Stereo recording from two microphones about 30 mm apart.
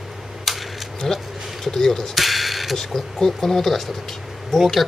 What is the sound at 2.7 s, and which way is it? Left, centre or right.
Speech, centre.